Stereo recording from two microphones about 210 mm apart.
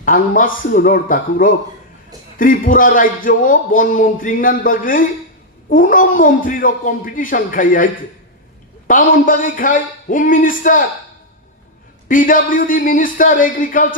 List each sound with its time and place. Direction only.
0.0 s a man's voice: 40° left (ahead or behind)
12.1 s a man's voice: 40° left (ahead or behind)